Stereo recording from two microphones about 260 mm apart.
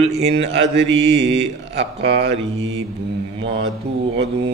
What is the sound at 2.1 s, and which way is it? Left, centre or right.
Mantra, right.